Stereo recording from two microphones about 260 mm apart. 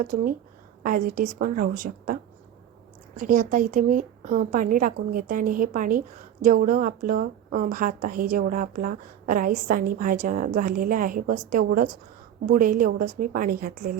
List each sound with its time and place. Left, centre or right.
0.0 s a woman's voice: right
3.2 s a woman's voice: right